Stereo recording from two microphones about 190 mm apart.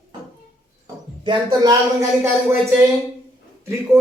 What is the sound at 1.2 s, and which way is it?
Speech, 20° right (ahead or behind).